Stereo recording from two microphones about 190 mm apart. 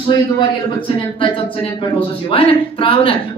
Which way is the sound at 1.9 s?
30° left (ahead or behind).